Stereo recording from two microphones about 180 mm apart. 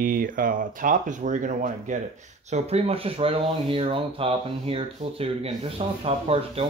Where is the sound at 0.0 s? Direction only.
50° right (ahead or behind).